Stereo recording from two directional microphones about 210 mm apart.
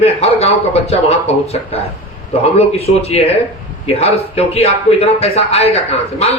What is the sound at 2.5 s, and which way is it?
A man's voice, 30° left (ahead or behind).